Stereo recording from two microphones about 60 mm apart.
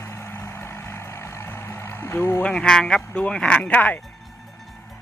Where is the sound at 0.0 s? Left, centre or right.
Left.